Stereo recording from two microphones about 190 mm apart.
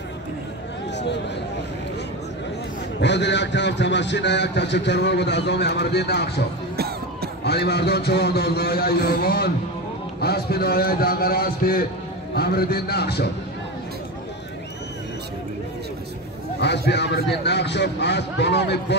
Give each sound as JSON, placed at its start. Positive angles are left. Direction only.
{"t": 0.9, "sound": "a sound", "side_deg": 65}
{"t": 3.0, "sound": "a man's voice", "side_deg": 65}
{"t": 7.4, "sound": "a man's voice", "side_deg": 60}
{"t": 16.5, "sound": "a man's voice", "side_deg": 65}